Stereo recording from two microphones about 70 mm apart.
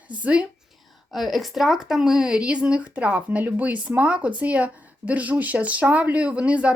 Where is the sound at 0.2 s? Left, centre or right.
Centre.